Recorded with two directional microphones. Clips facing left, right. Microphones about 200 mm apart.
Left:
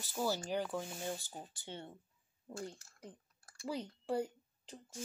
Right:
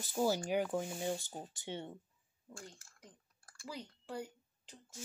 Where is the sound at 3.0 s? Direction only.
25° left (ahead or behind).